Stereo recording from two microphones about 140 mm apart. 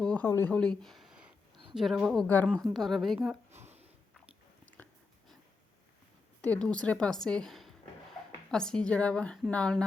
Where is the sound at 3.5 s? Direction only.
50° right (ahead or behind).